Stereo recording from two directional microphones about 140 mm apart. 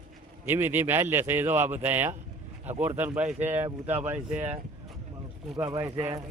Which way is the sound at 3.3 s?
50° right (ahead or behind).